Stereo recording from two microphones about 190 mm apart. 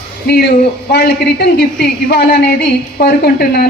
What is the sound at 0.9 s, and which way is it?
A woman's voice, 60° left (ahead or behind).